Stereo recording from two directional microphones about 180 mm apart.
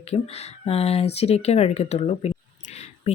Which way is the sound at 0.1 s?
35° left (ahead or behind).